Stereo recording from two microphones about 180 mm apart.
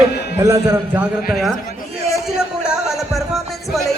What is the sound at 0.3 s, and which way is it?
Speech, 15° right (ahead or behind).